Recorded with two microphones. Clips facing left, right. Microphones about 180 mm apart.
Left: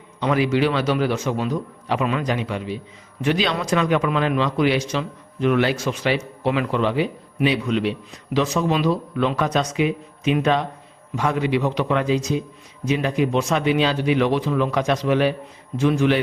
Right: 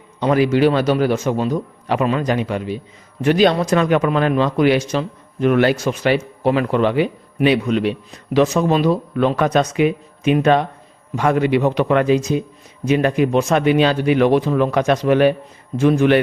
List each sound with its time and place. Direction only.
0.2 s a man's voice: 45° right (ahead or behind)